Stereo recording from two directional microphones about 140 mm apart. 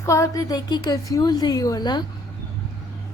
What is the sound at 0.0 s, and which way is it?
A child's voice, 20° left (ahead or behind).